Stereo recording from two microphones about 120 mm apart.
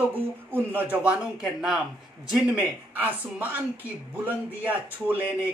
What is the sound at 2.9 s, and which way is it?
A man's voice, 15° right (ahead or behind).